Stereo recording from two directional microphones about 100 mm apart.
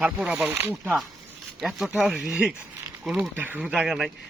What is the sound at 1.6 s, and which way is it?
Speech, 5° right (ahead or behind).